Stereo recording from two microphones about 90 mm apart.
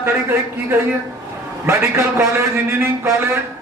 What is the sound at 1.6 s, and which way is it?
Speech, 30° right (ahead or behind).